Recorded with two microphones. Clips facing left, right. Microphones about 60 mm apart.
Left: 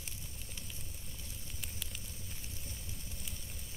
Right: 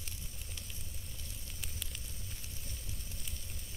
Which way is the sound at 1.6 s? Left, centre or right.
Centre.